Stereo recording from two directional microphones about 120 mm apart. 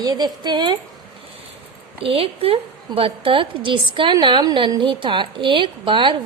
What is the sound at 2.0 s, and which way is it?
A woman's voice, 50° right (ahead or behind).